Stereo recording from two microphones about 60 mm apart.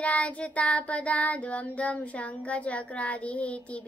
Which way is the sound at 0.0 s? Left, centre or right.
Left.